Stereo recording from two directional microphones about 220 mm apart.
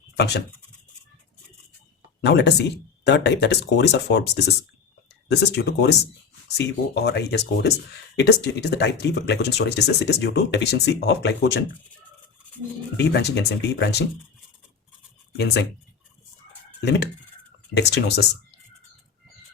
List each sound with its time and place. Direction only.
0.2 s speech: 50° left (ahead or behind)
2.2 s speech: 50° left (ahead or behind)
5.3 s speech: 50° left (ahead or behind)
13.0 s speech: 50° left (ahead or behind)
15.4 s speech: 50° left (ahead or behind)
16.8 s speech: 50° left (ahead or behind)